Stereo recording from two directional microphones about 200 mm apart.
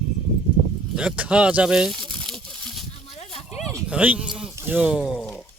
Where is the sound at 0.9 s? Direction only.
5° right (ahead or behind).